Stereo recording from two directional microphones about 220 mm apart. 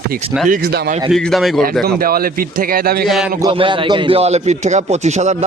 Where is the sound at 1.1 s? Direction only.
Centre (ahead or behind).